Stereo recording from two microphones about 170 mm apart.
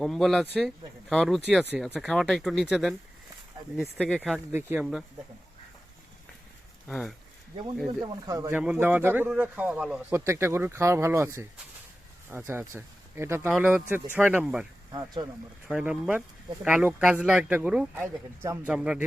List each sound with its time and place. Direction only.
0.0 s speech: 5° left (ahead or behind)
4.5 s a man's voice: 10° right (ahead or behind)
6.8 s speech: centre (ahead or behind)
8.0 s speech: 20° right (ahead or behind)
8.5 s a man's voice: 5° right (ahead or behind)
12.5 s speech: 15° right (ahead or behind)
13.5 s a man's voice: 5° right (ahead or behind)
14.9 s speech: 25° right (ahead or behind)
15.6 s a man's voice: 5° right (ahead or behind)
18.7 s speech: 5° right (ahead or behind)